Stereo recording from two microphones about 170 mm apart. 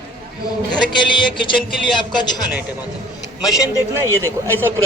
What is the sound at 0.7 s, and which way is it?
Speech, 25° left (ahead or behind).